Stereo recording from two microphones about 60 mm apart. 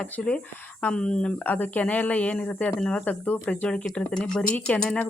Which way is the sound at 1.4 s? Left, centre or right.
Left.